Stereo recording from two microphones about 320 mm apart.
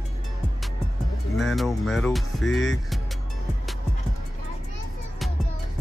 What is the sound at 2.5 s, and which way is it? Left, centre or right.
Speech, left.